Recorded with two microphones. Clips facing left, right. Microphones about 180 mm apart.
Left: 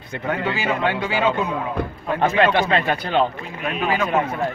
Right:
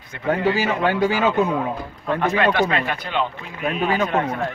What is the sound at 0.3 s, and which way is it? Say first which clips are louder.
A man's voice: right 3 dB; 40° right (ahead or behind).